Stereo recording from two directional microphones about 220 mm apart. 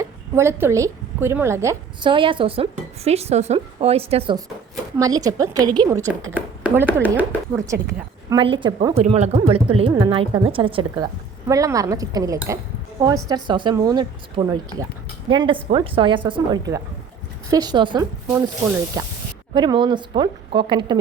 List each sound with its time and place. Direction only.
0.0 s a woman's voice: 10° right (ahead or behind)